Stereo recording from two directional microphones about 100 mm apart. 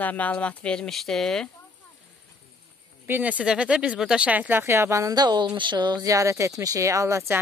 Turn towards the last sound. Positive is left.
turn(degrees=-30)  # may be behind; listen again after turning